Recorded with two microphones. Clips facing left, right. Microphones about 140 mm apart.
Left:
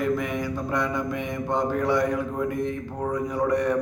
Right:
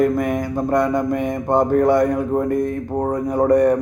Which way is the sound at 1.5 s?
50° right (ahead or behind).